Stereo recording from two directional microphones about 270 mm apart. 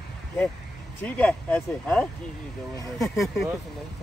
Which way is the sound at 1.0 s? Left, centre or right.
Centre.